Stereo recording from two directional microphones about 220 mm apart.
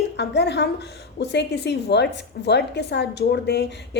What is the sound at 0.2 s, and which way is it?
A woman's voice, 50° left (ahead or behind).